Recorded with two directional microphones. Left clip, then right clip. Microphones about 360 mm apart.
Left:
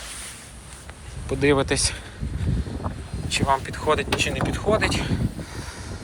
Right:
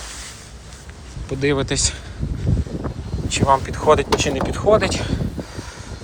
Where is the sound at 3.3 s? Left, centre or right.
Centre.